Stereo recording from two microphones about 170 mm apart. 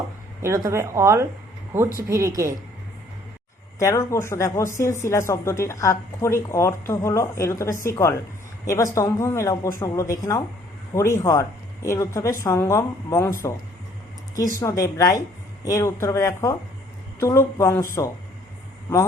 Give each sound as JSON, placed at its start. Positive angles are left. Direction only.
{"t": 0.4, "sound": "a woman's voice", "side_deg": -15}
{"t": 3.8, "sound": "a woman's voice", "side_deg": 15}
{"t": 14.6, "sound": "speech", "side_deg": 20}